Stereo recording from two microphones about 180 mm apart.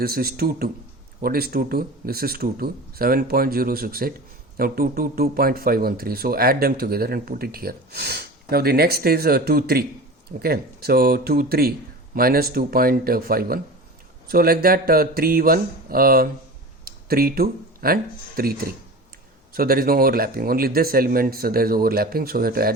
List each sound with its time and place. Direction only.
0.0 s speech: 55° right (ahead or behind)